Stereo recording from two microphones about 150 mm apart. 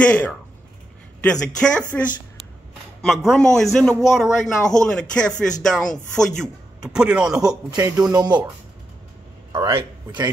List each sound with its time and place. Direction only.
0.1 s speech: 5° left (ahead or behind)
7.7 s speech: 20° right (ahead or behind)
9.7 s a man's voice: 35° right (ahead or behind)